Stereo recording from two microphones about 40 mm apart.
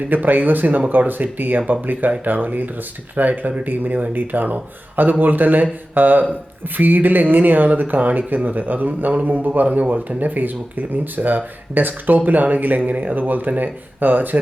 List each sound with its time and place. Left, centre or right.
0.1 s speech: right